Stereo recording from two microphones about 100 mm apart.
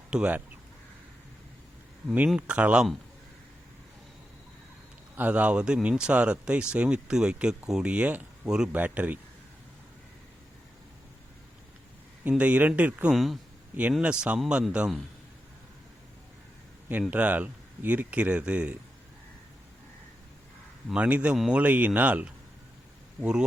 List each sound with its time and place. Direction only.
0.1 s speech: 10° right (ahead or behind)
2.0 s speech: 15° right (ahead or behind)
5.1 s speech: 15° right (ahead or behind)
12.4 s speech: 15° right (ahead or behind)
13.1 s a man's voice: centre (ahead or behind)
17.1 s speech: 15° right (ahead or behind)
20.9 s speech: 10° right (ahead or behind)